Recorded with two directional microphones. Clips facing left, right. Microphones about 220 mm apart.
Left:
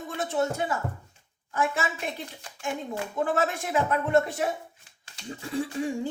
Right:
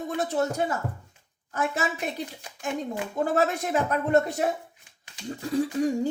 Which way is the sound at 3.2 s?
40° right (ahead or behind).